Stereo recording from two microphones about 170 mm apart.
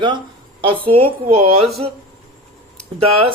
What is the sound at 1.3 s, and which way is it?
Speech, 35° right (ahead or behind).